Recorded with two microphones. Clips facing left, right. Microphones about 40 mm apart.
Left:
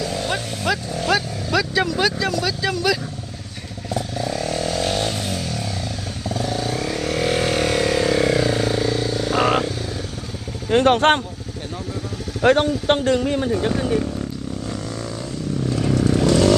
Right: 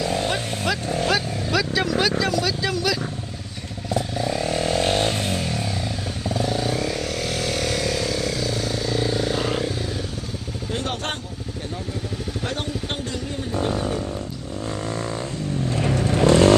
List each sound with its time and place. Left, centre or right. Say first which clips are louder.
0.0 s vehicle: right 2 dB; right
0.3 s vehicle: left 1 dB; centre
1.0 s speech: left 4 dB; centre
3.8 s motorcycle: right 1 dB; centre; by 5.5 s right
6.2 s vehicle: even; centre
9.0 s vehicle: even; centre
9.3 s vehicle: left 6 dB; left
10.7 s speech: left 13 dB; left
12.4 s speech: left 14 dB; left
13.6 s speech: left 2 dB; left
16.0 s vehicle: right 1 dB; right